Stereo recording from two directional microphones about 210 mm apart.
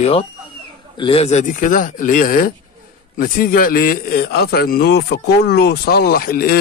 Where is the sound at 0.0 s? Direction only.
25° left (ahead or behind).